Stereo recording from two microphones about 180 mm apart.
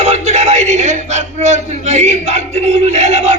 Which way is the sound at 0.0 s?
40° right (ahead or behind).